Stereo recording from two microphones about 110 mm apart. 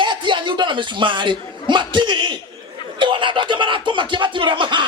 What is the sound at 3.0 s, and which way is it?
Speech, 50° right (ahead or behind).